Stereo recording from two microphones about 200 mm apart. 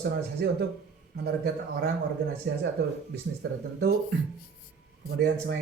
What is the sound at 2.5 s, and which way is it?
A man's voice, 55° right (ahead or behind).